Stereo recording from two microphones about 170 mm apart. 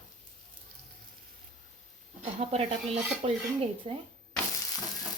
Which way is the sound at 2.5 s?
40° right (ahead or behind).